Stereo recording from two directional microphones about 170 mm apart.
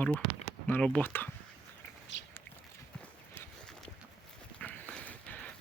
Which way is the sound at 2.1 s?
90° left.